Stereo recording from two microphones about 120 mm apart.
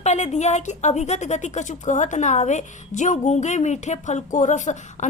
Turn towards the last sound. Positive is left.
turn(degrees=90)